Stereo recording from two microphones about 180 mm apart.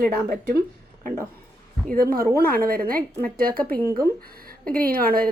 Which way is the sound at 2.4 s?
55° right (ahead or behind).